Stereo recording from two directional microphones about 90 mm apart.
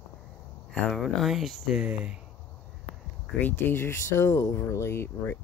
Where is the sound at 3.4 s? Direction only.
25° left (ahead or behind).